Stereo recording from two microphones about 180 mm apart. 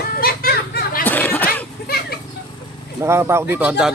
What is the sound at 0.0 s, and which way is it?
Children playing, 55° left (ahead or behind).